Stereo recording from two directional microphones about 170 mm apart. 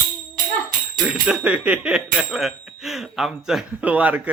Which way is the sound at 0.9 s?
Centre (ahead or behind).